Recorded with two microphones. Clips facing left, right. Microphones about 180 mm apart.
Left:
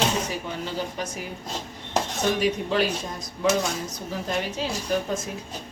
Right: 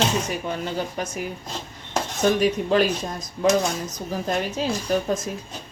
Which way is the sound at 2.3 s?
45° right (ahead or behind).